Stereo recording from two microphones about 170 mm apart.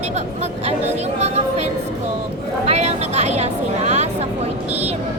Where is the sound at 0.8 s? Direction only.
40° right (ahead or behind).